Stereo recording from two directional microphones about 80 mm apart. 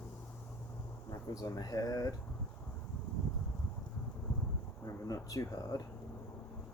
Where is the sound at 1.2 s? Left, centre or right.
Left.